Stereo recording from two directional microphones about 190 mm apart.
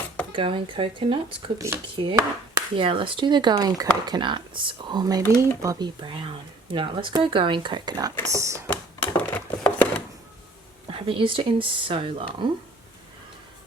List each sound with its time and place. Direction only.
0.3 s speech: 25° right (ahead or behind)
8.6 s a sound: 10° left (ahead or behind)
10.8 s speech: 30° right (ahead or behind)